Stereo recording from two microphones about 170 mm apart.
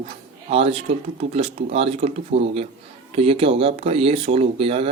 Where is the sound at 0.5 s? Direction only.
35° right (ahead or behind).